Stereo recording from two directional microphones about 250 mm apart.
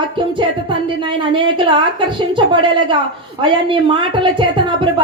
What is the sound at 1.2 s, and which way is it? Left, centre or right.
Speech, centre.